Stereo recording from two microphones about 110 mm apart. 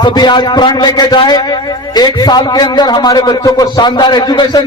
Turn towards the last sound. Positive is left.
turn(degrees=40)  # may be behind; listen again after turning